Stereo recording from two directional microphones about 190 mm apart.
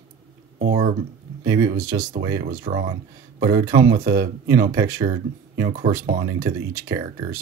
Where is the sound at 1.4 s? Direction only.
15° right (ahead or behind).